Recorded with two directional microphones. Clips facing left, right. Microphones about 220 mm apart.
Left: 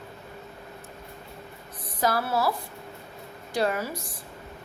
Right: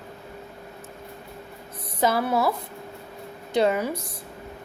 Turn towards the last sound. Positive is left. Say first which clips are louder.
# right 5 dB
turn(degrees=-20)  # may be behind; listen again after turning